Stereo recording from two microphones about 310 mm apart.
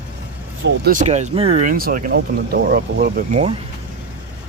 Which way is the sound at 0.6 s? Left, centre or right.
Right.